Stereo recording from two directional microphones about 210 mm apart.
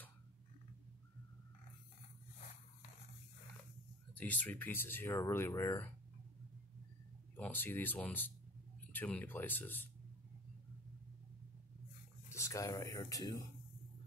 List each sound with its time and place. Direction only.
4.2 s speech: 5° left (ahead or behind)
7.3 s speech: 10° left (ahead or behind)
12.3 s speech: 15° left (ahead or behind)